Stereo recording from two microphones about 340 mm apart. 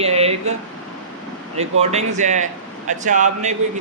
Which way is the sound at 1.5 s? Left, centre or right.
Centre.